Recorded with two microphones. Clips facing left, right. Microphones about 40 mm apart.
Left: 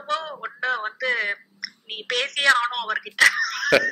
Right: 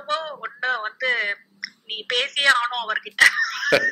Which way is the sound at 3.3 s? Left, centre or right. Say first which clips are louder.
Right 1 dB; right.